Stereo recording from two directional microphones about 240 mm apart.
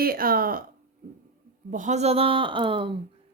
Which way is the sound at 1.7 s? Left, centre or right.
Right.